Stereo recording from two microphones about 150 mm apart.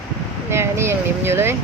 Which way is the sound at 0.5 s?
15° right (ahead or behind).